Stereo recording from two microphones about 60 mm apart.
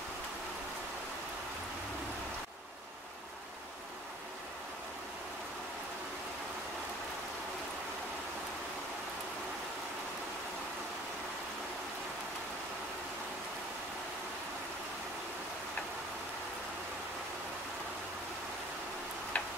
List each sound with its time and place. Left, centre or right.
19.3 s tick-tock: left